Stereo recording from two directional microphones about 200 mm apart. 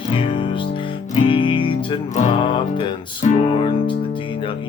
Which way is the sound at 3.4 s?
25° left (ahead or behind).